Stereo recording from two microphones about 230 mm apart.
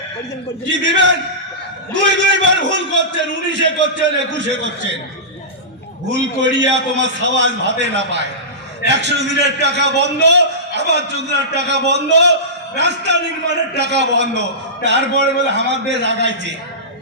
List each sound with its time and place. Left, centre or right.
0.7 s a man's voice: right
6.1 s a man's voice: right